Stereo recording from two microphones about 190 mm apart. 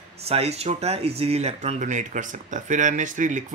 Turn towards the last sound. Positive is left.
turn(degrees=-40)  # may be behind; listen again after turning